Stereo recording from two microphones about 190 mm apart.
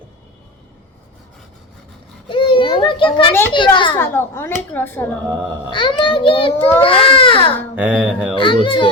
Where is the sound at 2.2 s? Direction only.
25° left (ahead or behind).